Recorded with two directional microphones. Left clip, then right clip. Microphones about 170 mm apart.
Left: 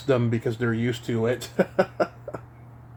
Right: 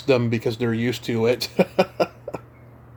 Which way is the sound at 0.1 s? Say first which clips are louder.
Right 4 dB; 15° right (ahead or behind).